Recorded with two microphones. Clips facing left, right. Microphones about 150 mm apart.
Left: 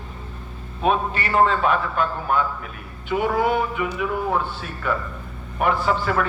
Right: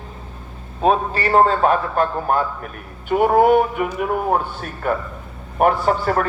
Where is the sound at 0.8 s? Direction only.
35° right (ahead or behind).